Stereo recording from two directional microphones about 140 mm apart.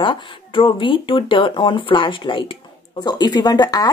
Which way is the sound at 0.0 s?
35° left (ahead or behind).